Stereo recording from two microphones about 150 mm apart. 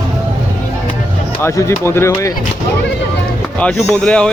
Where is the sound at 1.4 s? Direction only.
15° left (ahead or behind).